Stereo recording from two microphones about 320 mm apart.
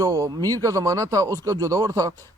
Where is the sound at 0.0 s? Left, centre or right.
Centre.